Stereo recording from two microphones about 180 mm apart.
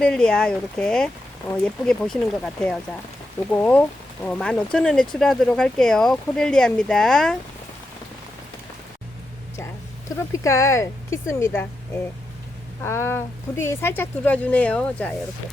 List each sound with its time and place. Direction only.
0.0 s speech: 5° left (ahead or behind)
10.3 s speech: 15° left (ahead or behind)
12.8 s speech: 15° left (ahead or behind)